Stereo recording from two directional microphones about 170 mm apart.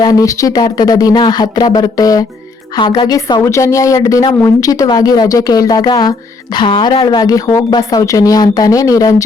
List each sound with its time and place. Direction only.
0.0 s a woman's voice: 20° left (ahead or behind)